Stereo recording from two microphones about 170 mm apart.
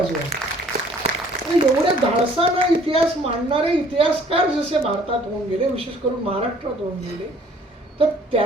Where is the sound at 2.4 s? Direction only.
35° right (ahead or behind).